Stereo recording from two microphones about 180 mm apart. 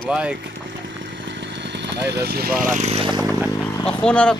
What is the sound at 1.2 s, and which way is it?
Vehicle, 75° right (ahead or behind).